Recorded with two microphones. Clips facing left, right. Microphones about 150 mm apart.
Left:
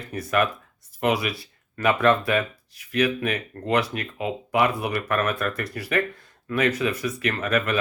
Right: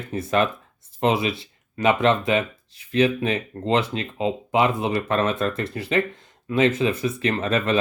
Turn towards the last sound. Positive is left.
turn(degrees=-25)  # may be behind; listen again after turning